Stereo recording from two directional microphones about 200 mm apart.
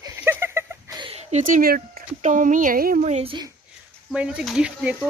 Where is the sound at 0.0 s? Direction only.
15° right (ahead or behind); by 3.4 s 30° right (ahead or behind).